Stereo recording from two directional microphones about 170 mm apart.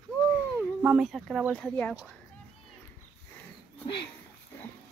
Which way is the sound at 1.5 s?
10° left (ahead or behind).